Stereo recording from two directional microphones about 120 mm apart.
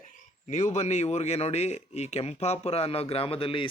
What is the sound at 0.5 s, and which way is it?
A man's voice, 80° left.